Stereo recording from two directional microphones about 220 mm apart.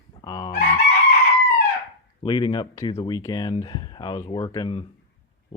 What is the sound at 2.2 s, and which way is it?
Speech, 20° left (ahead or behind).